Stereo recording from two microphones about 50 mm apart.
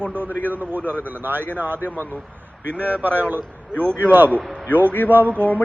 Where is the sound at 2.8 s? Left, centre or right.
Right.